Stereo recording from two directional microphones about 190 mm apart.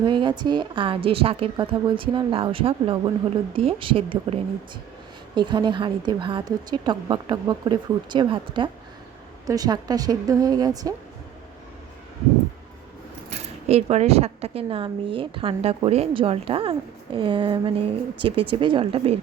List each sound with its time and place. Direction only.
0.0 s speech: 25° right (ahead or behind)
13.3 s speech: 35° right (ahead or behind)